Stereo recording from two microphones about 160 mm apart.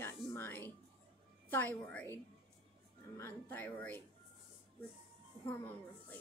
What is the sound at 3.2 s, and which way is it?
Speech, 15° left (ahead or behind).